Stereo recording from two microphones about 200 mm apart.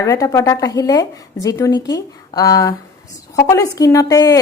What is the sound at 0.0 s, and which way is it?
A woman's voice, 15° left (ahead or behind).